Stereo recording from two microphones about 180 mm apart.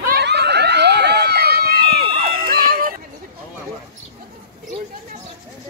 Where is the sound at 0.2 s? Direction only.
70° right (ahead or behind); by 3.0 s 50° right (ahead or behind).